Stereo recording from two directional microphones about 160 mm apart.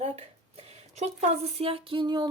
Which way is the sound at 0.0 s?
40° right (ahead or behind).